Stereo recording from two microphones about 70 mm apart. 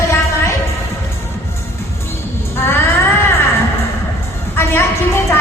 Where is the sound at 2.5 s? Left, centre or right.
Left.